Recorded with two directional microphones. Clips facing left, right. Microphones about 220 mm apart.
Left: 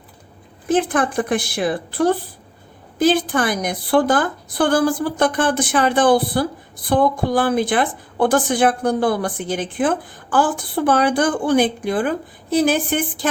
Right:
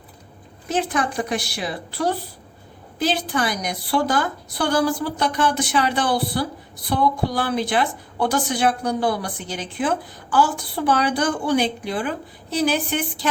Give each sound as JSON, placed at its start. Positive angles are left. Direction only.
{"t": 0.7, "sound": "a woman's voice", "side_deg": 50}